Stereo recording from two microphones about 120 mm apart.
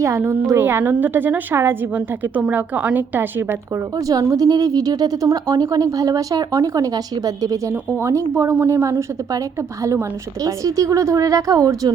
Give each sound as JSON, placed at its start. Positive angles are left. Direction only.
{"t": 0.0, "sound": "a woman's voice", "side_deg": -20}
{"t": 3.9, "sound": "speech", "side_deg": -30}
{"t": 7.7, "sound": "a woman's voice", "side_deg": -15}